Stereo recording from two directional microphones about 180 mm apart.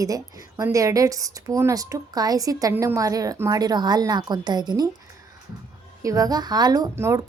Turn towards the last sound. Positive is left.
turn(degrees=-15)  # may be behind; listen again after turning